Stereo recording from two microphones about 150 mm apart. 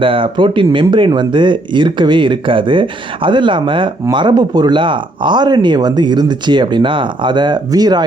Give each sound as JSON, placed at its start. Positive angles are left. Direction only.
{"t": 0.0, "sound": "speech", "side_deg": -35}